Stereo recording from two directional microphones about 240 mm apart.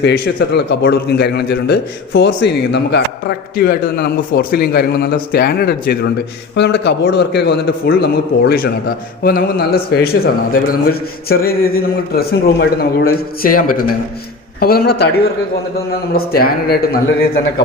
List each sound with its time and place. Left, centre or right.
0.0 s a man's voice: left